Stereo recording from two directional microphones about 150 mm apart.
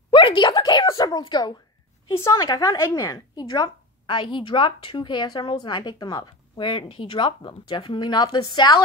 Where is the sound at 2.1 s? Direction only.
20° left (ahead or behind).